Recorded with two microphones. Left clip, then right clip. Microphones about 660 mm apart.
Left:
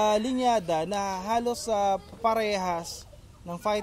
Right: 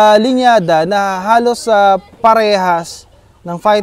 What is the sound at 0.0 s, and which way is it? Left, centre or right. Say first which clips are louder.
Speech: right 16 dB; right.